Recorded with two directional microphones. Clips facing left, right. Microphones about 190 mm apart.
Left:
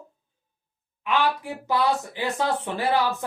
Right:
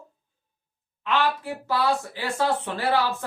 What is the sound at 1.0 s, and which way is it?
A woman's voice, 15° left (ahead or behind).